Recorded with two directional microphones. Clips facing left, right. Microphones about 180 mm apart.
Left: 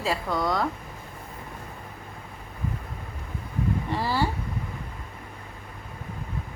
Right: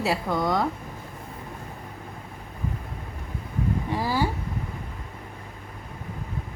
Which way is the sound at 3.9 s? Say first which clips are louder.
Right 2 dB; 10° right (ahead or behind).